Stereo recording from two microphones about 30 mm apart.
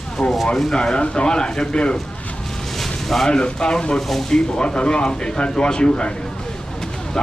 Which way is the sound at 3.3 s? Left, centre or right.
Left.